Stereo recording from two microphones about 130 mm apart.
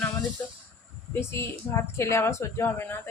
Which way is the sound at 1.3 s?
20° left (ahead or behind).